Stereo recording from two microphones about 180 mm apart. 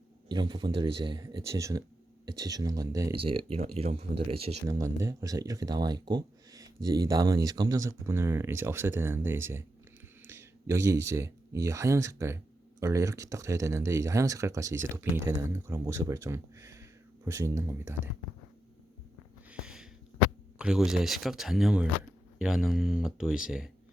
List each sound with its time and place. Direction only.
0.3 s speech: 25° right (ahead or behind)
3.5 s speech: 35° right (ahead or behind)
4.7 s speech: 15° right (ahead or behind)
19.5 s a sound: 5° right (ahead or behind)
20.6 s speech: 5° right (ahead or behind)